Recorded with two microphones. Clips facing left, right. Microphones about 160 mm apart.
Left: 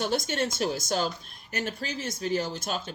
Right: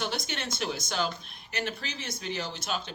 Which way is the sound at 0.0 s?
45° left (ahead or behind).